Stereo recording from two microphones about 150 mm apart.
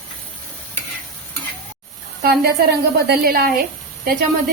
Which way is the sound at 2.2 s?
90° right.